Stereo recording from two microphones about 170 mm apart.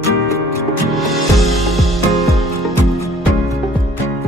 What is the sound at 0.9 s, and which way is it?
Music, centre (ahead or behind).